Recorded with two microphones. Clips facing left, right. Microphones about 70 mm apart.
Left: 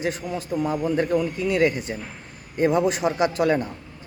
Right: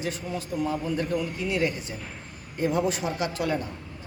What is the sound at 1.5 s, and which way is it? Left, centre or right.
Speech, left.